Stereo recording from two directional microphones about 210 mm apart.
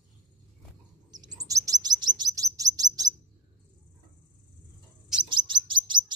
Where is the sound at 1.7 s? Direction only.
20° right (ahead or behind).